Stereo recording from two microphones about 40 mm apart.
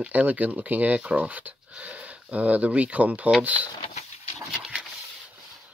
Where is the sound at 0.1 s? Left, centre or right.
Right.